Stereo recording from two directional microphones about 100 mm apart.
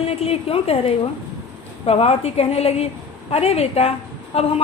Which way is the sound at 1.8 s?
85° left.